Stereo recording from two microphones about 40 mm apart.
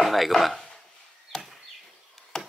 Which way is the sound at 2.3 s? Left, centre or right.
Centre.